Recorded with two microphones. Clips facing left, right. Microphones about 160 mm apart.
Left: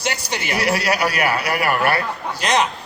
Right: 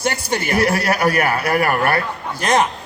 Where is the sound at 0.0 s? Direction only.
50° right (ahead or behind).